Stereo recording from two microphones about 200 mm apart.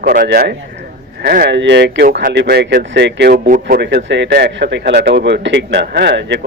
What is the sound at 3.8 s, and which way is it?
A man's voice, 60° right (ahead or behind).